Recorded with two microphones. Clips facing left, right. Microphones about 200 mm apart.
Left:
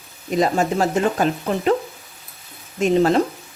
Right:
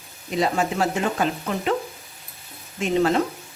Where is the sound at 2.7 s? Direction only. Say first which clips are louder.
Left 4 dB; 40° left (ahead or behind).